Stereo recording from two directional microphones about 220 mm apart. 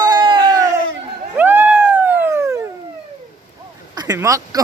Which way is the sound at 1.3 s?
5° right (ahead or behind).